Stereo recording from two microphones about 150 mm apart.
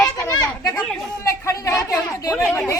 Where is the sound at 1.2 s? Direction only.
20° left (ahead or behind).